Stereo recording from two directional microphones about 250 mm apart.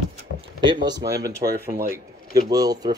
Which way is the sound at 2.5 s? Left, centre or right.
Centre.